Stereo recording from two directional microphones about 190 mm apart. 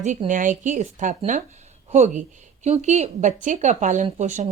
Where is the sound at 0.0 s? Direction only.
40° right (ahead or behind).